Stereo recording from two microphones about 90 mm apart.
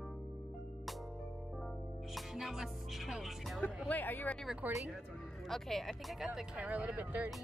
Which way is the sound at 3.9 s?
20° left (ahead or behind).